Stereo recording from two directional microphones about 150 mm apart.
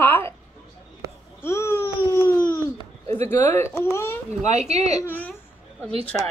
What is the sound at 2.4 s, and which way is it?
Babbling, 30° left (ahead or behind).